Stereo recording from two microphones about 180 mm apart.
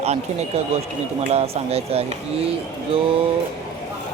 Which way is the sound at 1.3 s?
35° right (ahead or behind).